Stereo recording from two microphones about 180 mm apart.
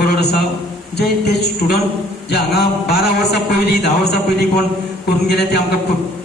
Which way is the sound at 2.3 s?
65° left (ahead or behind).